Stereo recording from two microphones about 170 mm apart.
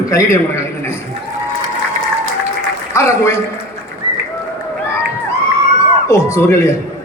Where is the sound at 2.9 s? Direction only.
15° left (ahead or behind).